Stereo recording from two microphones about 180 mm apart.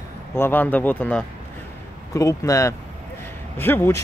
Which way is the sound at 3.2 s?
10° left (ahead or behind).